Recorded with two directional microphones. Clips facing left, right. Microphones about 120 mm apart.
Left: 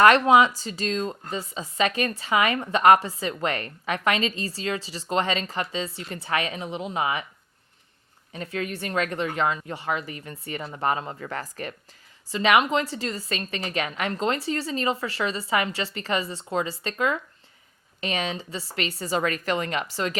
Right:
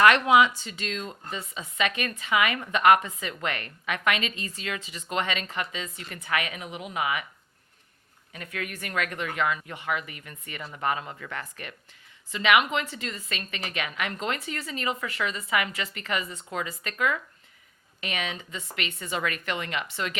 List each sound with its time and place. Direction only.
0.0 s a woman's voice: 35° left (ahead or behind)
8.3 s a woman's voice: 30° left (ahead or behind)